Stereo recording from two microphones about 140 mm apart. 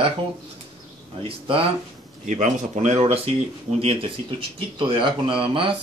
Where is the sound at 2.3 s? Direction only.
60° right (ahead or behind); by 5.7 s 40° right (ahead or behind).